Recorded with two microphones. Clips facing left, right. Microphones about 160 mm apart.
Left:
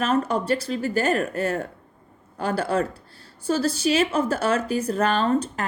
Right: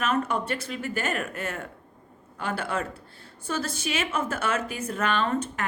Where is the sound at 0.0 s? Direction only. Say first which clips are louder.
Left 4 dB; 35° left (ahead or behind).